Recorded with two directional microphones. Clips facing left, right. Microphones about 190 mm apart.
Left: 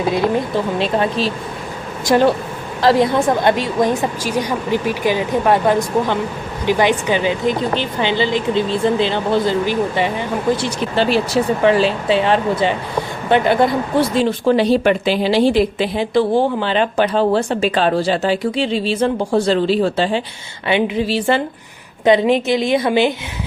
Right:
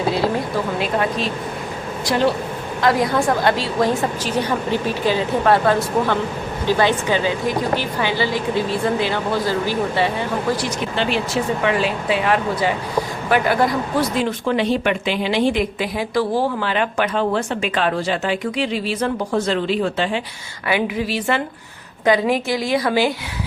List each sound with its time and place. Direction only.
0.8 s speech: 30° left (ahead or behind)
2.1 s speech: 50° left (ahead or behind)
2.8 s a woman's voice: 25° left (ahead or behind)
10.9 s speech: 40° left (ahead or behind); by 23.1 s 20° left (ahead or behind)